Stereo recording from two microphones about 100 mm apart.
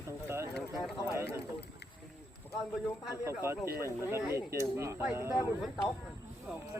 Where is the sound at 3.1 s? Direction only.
25° right (ahead or behind).